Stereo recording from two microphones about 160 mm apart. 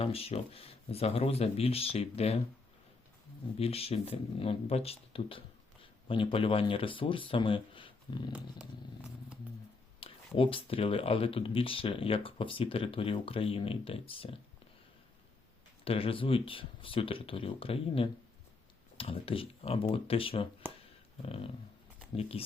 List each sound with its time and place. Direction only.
0.0 s speech: 40° left (ahead or behind)
3.6 s speech: 40° left (ahead or behind)
10.0 s speech: 35° left (ahead or behind)
15.8 s speech: 35° left (ahead or behind)